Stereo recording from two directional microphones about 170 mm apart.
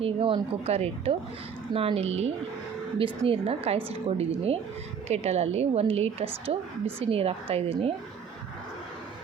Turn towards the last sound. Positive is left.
turn(degrees=-35)  # may be behind; listen again after turning